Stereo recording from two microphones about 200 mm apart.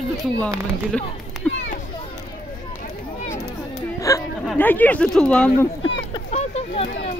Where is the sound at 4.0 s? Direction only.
15° left (ahead or behind).